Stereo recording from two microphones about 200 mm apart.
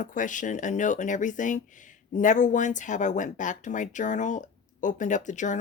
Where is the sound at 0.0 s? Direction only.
40° left (ahead or behind).